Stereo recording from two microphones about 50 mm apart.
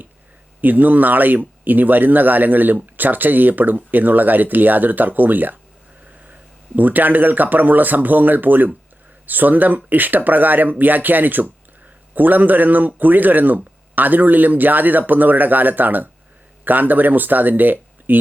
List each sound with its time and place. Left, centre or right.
0.6 s speech: right
6.7 s speech: right